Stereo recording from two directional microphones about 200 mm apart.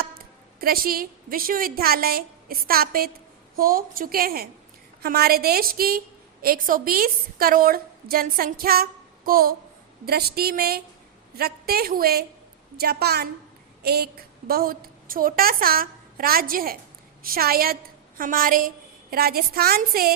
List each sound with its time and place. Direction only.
0.0 s a woman's voice: 50° right (ahead or behind)